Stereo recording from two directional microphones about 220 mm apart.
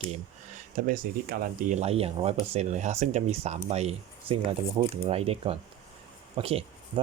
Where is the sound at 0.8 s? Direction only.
40° right (ahead or behind).